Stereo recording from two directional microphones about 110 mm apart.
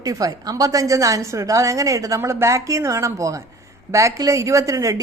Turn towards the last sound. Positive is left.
turn(degrees=-30)  # may be behind; listen again after turning